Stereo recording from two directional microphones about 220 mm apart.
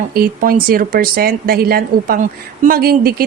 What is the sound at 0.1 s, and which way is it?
A woman's voice, 45° right (ahead or behind).